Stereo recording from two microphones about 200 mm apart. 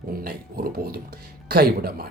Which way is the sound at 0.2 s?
50° right (ahead or behind).